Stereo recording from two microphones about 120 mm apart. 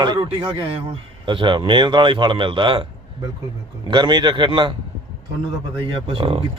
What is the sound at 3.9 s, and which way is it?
Speech, 40° right (ahead or behind).